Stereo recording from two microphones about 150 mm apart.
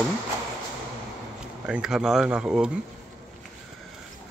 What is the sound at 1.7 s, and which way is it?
Speech, 5° right (ahead or behind).